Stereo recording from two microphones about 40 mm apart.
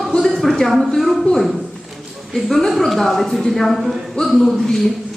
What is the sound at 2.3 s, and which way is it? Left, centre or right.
A woman's voice, centre.